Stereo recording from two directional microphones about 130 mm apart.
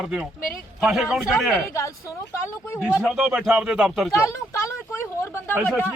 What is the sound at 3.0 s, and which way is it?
A man's voice, 10° right (ahead or behind).